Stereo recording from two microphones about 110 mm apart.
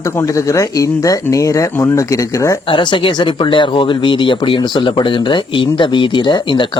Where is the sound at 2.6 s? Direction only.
50° left (ahead or behind).